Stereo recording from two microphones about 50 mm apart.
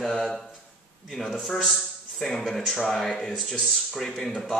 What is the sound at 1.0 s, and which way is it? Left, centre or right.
Speech, centre.